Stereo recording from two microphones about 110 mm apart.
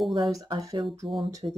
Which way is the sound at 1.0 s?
50° right (ahead or behind).